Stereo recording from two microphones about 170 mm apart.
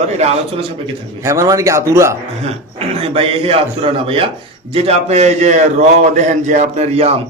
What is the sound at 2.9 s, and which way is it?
A man's voice, 35° right (ahead or behind).